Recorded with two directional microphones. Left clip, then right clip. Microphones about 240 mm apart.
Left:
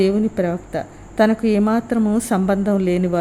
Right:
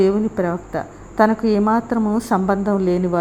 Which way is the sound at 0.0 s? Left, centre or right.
Centre.